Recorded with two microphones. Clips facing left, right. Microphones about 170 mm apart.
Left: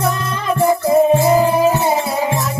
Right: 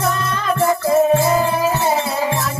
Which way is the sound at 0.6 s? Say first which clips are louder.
Left 3 dB; 15° left (ahead or behind).